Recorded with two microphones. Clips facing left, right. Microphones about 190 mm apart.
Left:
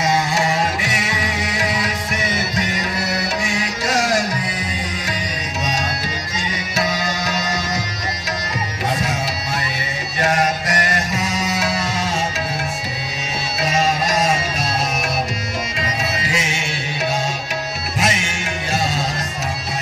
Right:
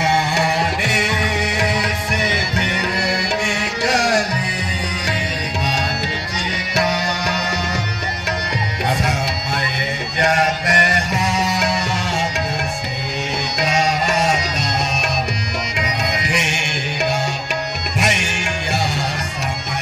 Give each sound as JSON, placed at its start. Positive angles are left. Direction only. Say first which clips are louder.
{"t": 2.5, "sound": "music", "louder": "right 1 dB", "side_deg": -65}
{"t": 6.7, "sound": "music", "louder": "right 3 dB", "side_deg": -65}
{"t": 10.7, "sound": "music", "louder": "right 2 dB", "side_deg": -65}
{"t": 13.6, "sound": "music", "louder": "even", "side_deg": -65}
{"t": 16.0, "sound": "music", "louder": "right 1 dB", "side_deg": -65}